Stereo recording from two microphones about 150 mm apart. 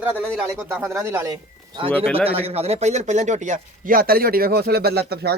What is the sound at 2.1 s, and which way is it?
Speech, 40° right (ahead or behind).